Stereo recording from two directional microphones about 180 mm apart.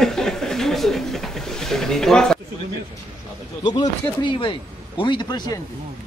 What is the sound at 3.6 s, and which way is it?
Speech, 25° left (ahead or behind).